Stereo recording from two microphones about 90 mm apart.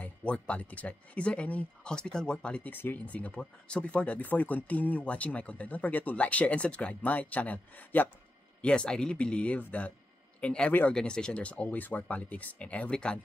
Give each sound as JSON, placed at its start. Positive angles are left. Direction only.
{"t": 0.0, "sound": "speech", "side_deg": 15}